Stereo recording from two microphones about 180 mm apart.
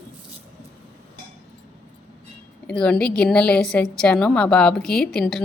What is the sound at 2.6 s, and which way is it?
A woman's voice, 5° left (ahead or behind).